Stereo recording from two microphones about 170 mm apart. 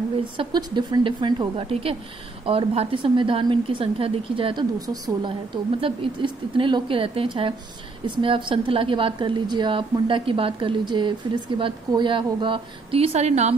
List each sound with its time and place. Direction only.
0.4 s a woman's voice: 25° right (ahead or behind); by 13.6 s 40° right (ahead or behind)